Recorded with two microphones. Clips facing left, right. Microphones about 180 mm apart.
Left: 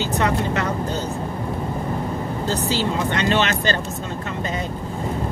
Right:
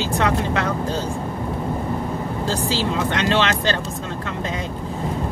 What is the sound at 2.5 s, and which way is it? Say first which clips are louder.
Speech: left 1 dB; 90° right.